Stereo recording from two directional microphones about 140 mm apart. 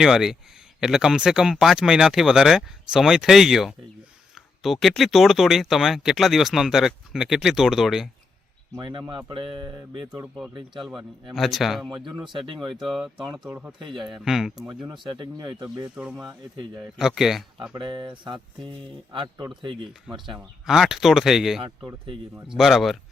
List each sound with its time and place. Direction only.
0.0 s speech: 5° right (ahead or behind)
8.8 s speech: 35° right (ahead or behind)
10.8 s speech: centre (ahead or behind)
14.9 s speech: 35° right (ahead or behind)
16.0 s speech: 5° right (ahead or behind)
17.6 s speech: 35° right (ahead or behind)
20.3 s speech: centre (ahead or behind)
21.8 s speech: 40° right (ahead or behind)
22.5 s speech: centre (ahead or behind)